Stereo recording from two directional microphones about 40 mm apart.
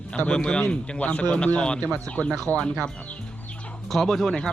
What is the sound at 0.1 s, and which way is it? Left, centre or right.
Speech, left.